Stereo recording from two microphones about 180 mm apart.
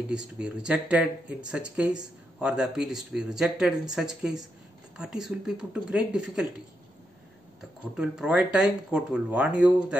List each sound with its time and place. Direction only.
0.1 s speech: 5° right (ahead or behind)
7.9 s speech: 5° right (ahead or behind)